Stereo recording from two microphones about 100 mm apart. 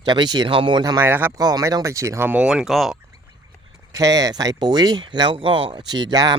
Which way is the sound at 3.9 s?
35° right (ahead or behind).